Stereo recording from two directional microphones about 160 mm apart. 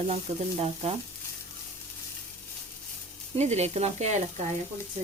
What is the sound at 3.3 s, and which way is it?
Speech, 45° right (ahead or behind).